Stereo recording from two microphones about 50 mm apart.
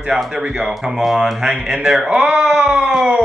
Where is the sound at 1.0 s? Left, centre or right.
Centre.